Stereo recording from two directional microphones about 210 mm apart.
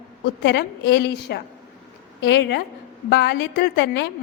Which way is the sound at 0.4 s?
55° left (ahead or behind).